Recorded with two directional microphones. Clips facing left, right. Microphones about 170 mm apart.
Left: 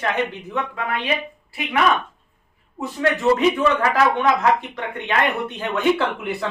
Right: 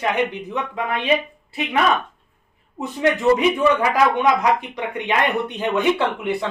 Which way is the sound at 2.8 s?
20° right (ahead or behind).